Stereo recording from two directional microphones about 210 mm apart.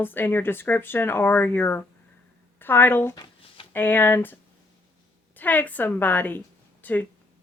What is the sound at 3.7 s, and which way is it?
A woman's voice, 10° left (ahead or behind).